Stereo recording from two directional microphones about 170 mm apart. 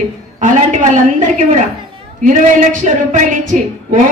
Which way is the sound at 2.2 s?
50° right (ahead or behind).